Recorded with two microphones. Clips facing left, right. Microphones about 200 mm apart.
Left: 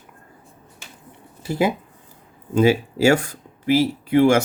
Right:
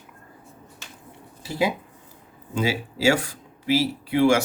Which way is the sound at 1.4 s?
50° left (ahead or behind).